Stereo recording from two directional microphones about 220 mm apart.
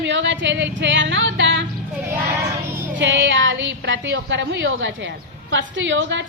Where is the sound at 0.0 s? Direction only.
55° right (ahead or behind).